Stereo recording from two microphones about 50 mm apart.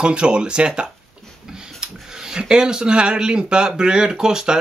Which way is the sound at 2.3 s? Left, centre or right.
Centre.